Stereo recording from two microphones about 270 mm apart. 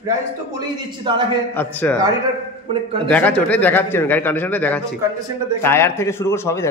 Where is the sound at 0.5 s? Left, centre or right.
Centre.